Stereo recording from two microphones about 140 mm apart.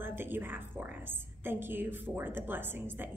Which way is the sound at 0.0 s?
15° right (ahead or behind).